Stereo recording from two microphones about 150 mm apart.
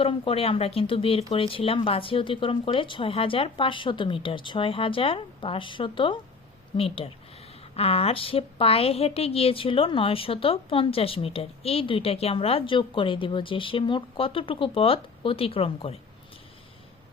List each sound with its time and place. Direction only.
0.0 s a woman's voice: 40° left (ahead or behind)